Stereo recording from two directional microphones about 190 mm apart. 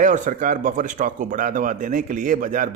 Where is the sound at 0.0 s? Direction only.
40° right (ahead or behind).